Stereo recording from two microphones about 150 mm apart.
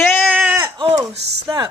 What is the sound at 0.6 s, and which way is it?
Speech, 35° right (ahead or behind).